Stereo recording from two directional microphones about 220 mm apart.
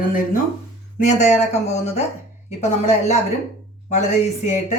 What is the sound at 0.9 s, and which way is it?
Speech, 30° left (ahead or behind).